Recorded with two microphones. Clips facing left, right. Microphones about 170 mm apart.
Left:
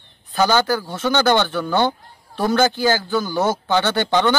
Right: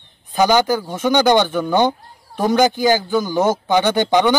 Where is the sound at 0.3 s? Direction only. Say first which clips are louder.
Right 3 dB; 15° right (ahead or behind).